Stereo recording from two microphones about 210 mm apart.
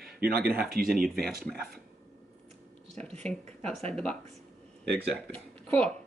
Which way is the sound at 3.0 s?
5° left (ahead or behind).